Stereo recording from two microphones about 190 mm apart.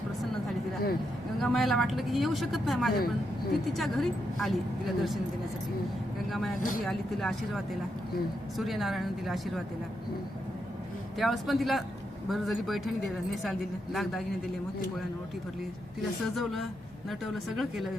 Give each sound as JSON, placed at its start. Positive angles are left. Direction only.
{"t": 1.4, "sound": "speech", "side_deg": 0}
{"t": 6.3, "sound": "speech", "side_deg": 0}
{"t": 11.2, "sound": "speech", "side_deg": 0}
{"t": 16.2, "sound": "speech", "side_deg": 0}